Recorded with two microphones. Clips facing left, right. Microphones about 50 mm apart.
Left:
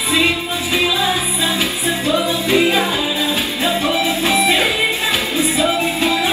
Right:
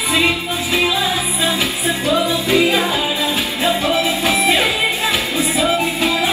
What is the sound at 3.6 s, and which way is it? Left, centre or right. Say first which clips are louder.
Music: right 2 dB; right.